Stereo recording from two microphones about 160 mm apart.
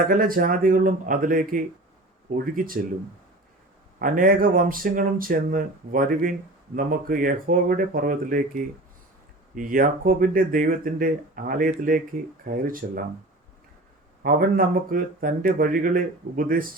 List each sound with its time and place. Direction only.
0.0 s speech: 65° right (ahead or behind)
4.0 s speech: 60° right (ahead or behind)
14.2 s speech: 60° right (ahead or behind)